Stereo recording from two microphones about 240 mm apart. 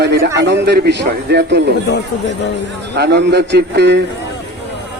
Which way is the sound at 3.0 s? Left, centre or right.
Right.